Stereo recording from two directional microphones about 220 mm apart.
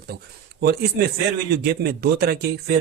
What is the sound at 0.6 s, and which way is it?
Speech, 45° right (ahead or behind).